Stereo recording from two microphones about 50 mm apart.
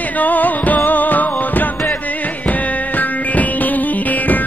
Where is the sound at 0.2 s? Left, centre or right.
Left.